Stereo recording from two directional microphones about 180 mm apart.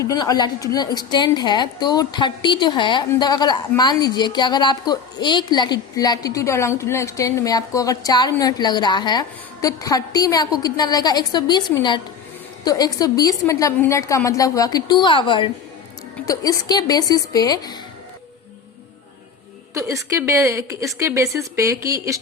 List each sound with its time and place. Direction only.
0.0 s a woman's voice: 20° left (ahead or behind)
16.1 s a woman's voice: 20° left (ahead or behind)
19.7 s a woman's voice: 15° right (ahead or behind)